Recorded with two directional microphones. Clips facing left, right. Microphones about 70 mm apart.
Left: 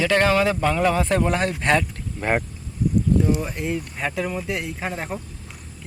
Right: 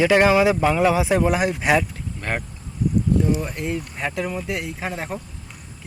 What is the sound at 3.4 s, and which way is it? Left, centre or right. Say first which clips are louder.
Speech: even; centre.